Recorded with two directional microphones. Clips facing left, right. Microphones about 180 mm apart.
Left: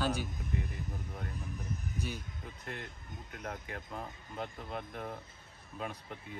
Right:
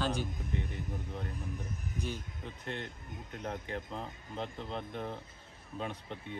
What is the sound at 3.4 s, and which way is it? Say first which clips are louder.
Speech: right 4 dB; 30° right (ahead or behind).